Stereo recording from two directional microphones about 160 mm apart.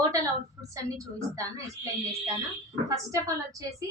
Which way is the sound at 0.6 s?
20° right (ahead or behind).